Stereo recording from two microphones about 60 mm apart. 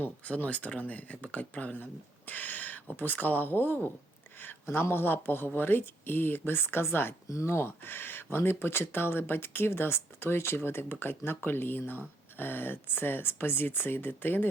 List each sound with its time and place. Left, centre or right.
0.0 s speech: left